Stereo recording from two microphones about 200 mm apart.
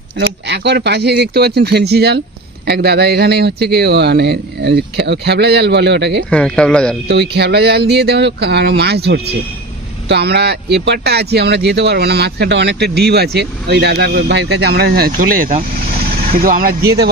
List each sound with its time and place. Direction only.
0.2 s speech: 60° right (ahead or behind)
6.3 s speech: 5° left (ahead or behind)
7.1 s speech: 55° right (ahead or behind)